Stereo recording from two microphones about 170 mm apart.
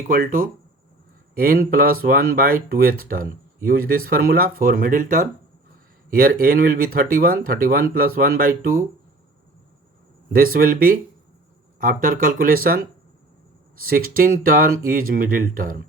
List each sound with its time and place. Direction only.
0.1 s speech: 55° right (ahead or behind)
10.3 s speech: 60° right (ahead or behind)